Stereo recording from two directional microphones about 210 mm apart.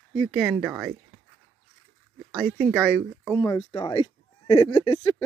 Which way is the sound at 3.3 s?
15° left (ahead or behind).